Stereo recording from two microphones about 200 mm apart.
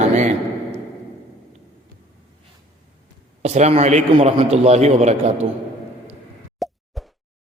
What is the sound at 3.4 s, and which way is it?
A man's voice, 35° right (ahead or behind).